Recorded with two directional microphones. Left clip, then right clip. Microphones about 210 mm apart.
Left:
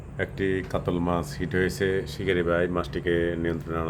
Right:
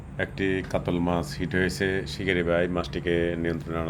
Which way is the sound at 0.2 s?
5° left (ahead or behind).